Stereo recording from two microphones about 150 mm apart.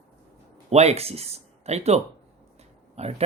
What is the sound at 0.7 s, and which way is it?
Speech, 45° right (ahead or behind).